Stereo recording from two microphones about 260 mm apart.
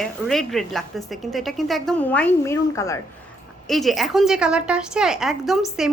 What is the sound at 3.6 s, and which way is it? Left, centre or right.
Speech, centre.